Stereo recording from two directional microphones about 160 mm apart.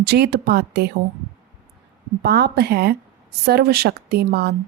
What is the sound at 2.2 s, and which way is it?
A woman's voice, 90° right.